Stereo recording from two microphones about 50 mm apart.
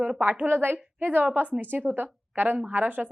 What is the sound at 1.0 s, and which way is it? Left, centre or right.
A woman's voice, right.